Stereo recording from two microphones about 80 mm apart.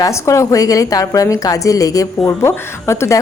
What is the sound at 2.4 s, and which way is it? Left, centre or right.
Speech, left.